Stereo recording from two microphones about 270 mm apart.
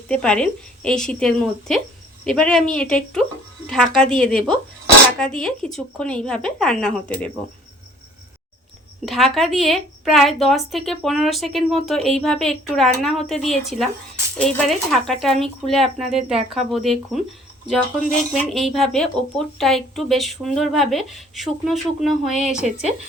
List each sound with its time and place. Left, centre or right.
0.1 s speech: centre
9.0 s speech: centre
18.5 s speech: centre
22.6 s speech: right